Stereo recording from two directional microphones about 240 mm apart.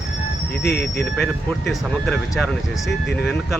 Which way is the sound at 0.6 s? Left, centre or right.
Left.